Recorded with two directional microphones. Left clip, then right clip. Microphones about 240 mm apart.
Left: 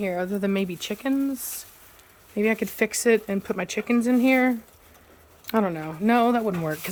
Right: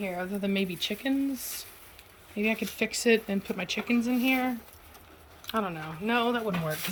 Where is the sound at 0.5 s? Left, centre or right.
Centre.